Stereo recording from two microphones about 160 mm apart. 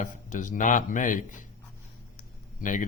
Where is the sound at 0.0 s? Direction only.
55° left (ahead or behind).